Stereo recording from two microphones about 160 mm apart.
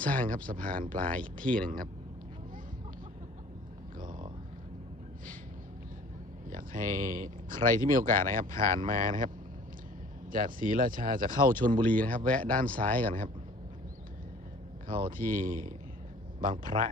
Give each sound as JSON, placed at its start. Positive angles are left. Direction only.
{"t": 0.2, "sound": "speech", "side_deg": -60}
{"t": 1.5, "sound": "speech", "side_deg": 5}
{"t": 6.5, "sound": "speech", "side_deg": -60}
{"t": 10.3, "sound": "speech", "side_deg": -60}
{"t": 11.9, "sound": "speech", "side_deg": 10}
{"t": 14.8, "sound": "speech", "side_deg": -60}